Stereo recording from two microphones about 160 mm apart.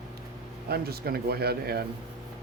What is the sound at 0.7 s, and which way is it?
Speech, 75° right (ahead or behind).